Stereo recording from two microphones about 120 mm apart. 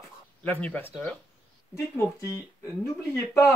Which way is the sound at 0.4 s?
15° left (ahead or behind).